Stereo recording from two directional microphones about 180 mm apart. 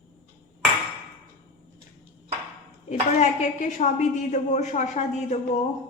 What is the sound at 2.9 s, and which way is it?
A woman's voice, 40° left (ahead or behind).